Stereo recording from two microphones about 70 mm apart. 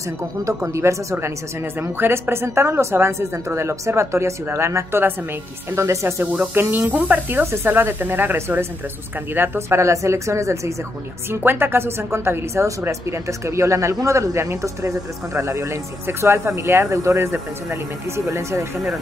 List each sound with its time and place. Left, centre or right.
0.4 s speech: right
6.9 s speech: right
7.5 s speech: right
9.8 s speech: right
11.4 s speech: right